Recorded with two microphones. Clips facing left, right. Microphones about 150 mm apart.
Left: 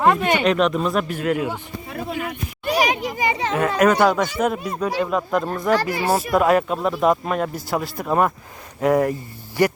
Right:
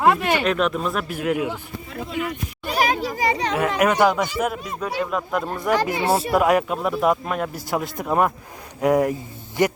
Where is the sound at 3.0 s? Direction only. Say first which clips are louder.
Even; 20° left (ahead or behind).